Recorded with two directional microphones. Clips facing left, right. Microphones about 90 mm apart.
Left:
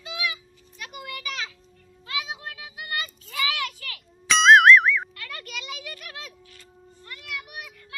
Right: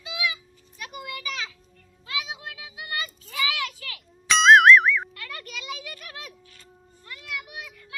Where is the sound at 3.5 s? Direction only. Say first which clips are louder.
Even; 15° right (ahead or behind).